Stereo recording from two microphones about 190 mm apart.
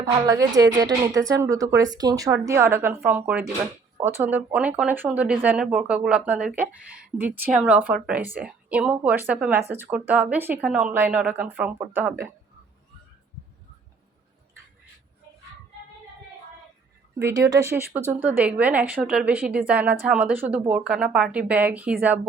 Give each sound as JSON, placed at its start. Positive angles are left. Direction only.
{"t": 0.0, "sound": "speech", "side_deg": -20}
{"t": 17.2, "sound": "speech", "side_deg": -15}